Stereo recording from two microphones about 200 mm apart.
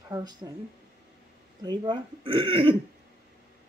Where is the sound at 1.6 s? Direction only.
25° right (ahead or behind).